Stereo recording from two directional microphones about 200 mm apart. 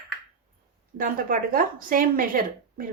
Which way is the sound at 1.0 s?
45° right (ahead or behind).